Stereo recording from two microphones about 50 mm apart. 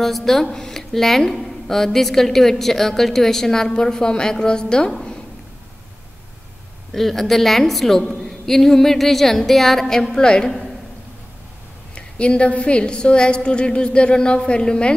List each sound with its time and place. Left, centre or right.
0.0 s a woman's voice: centre
6.9 s a woman's voice: centre
11.9 s a woman's voice: left